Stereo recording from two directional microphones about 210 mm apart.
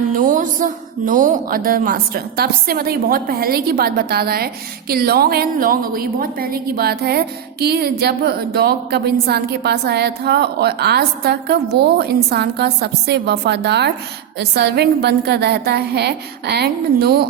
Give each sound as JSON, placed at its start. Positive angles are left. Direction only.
{"t": 0.2, "sound": "a woman's voice", "side_deg": -40}